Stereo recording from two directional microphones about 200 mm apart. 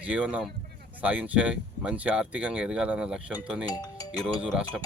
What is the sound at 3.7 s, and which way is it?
Speech, 20° left (ahead or behind).